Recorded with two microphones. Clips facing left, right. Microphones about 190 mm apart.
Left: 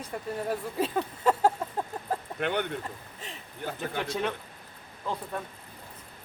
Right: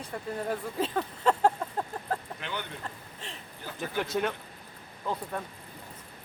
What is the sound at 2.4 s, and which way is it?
Speech, 60° left (ahead or behind).